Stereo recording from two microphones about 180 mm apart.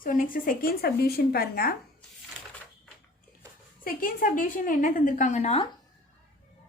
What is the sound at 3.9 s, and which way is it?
A woman's voice, 50° left (ahead or behind).